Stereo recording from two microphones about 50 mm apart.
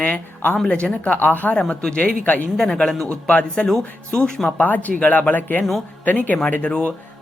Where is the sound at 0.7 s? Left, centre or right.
Left.